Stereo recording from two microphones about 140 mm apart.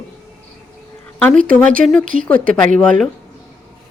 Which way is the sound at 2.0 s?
70° right (ahead or behind).